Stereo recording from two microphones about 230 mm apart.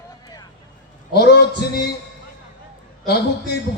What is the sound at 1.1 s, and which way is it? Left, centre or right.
Speech, left.